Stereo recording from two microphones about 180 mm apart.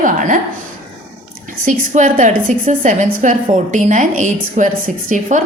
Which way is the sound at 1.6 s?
50° right (ahead or behind).